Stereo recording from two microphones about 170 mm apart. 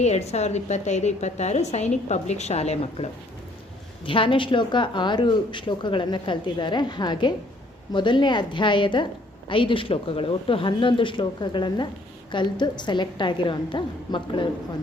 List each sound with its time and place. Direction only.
0.0 s a woman's voice: 40° left (ahead or behind)